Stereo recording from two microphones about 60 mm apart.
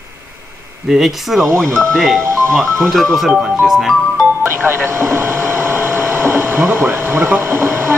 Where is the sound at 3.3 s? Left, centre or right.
Centre.